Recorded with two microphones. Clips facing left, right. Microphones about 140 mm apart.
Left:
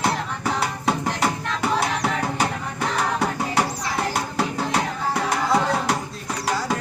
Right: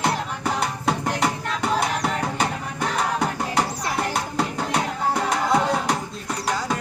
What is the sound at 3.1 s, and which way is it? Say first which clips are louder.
Music: left 1 dB; 5° left (ahead or behind).